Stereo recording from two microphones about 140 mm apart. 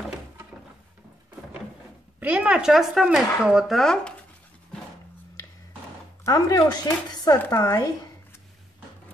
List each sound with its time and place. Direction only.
2.1 s speech: 10° right (ahead or behind)
6.2 s speech: 25° left (ahead or behind)